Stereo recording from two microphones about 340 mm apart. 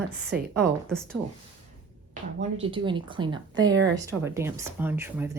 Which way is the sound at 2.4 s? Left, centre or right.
Centre.